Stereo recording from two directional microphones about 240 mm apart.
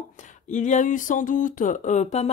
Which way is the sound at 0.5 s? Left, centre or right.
Left.